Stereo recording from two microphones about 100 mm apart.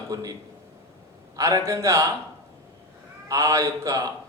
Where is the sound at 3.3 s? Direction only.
30° right (ahead or behind).